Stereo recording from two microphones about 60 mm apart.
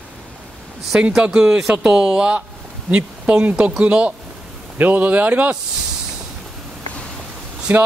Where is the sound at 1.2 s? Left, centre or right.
Centre.